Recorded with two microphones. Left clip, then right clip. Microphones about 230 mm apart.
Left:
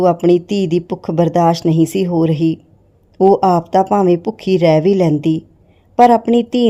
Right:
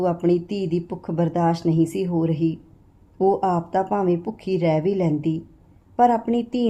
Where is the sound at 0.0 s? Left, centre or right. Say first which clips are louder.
Left 9 dB; left.